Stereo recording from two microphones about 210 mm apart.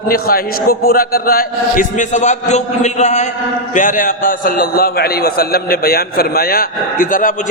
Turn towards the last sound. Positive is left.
turn(degrees=40)  # may be behind; listen again after turning